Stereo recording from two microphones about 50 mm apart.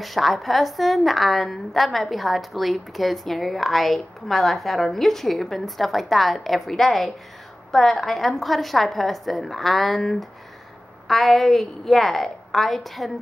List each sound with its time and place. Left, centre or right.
0.0 s a woman's voice: centre